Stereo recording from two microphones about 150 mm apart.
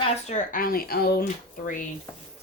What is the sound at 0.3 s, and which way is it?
Speech, 60° left (ahead or behind).